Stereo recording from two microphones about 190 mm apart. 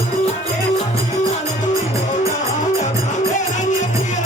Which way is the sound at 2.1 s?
40° left (ahead or behind).